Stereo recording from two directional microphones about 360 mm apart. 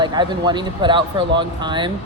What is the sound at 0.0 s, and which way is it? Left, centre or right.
Speech, centre.